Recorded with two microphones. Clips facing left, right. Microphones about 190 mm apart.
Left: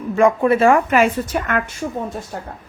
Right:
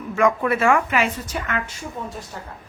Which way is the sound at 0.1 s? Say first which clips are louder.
Left 5 dB; 30° left (ahead or behind).